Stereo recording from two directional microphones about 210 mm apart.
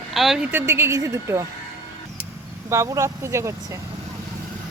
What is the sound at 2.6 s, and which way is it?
A woman's voice, 15° right (ahead or behind).